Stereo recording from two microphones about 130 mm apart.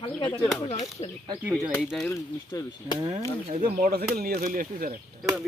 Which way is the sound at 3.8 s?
90° right.